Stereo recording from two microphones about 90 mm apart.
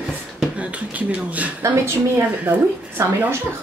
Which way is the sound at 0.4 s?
15° right (ahead or behind).